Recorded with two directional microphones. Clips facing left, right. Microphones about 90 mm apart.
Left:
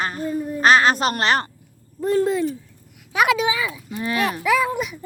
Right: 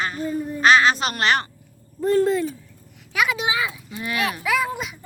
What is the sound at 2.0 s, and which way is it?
Owl, 10° left (ahead or behind).